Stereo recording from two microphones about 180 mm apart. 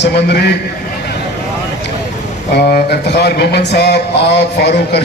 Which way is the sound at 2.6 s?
60° left (ahead or behind).